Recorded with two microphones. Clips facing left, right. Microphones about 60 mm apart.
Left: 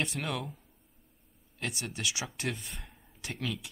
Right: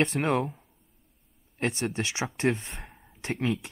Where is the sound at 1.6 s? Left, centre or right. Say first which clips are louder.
Right 7 dB; right.